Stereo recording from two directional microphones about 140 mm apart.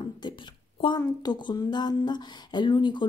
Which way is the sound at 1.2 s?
30° left (ahead or behind).